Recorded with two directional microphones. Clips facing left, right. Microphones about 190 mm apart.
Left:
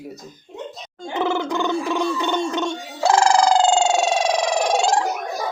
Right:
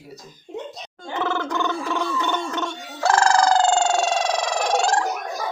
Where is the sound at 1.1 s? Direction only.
15° left (ahead or behind).